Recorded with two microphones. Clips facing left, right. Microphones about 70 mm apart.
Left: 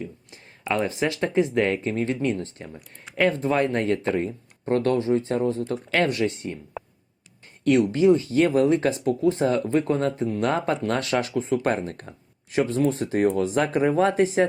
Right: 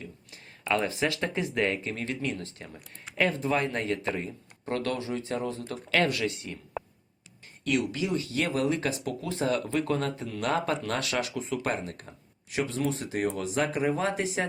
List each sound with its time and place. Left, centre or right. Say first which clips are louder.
0.0 s speech: left 8 dB; left
7.6 s speech: left 10 dB; left